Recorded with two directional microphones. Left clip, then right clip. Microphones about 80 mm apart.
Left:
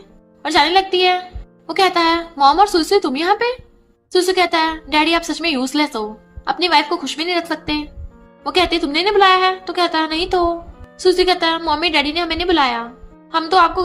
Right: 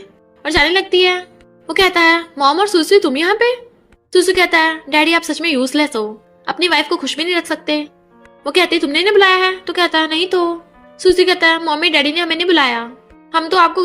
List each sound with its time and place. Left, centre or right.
0.0 s a woman's voice: right